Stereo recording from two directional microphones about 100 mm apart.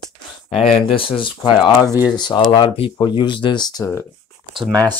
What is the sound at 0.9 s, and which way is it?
Speech, 60° left (ahead or behind).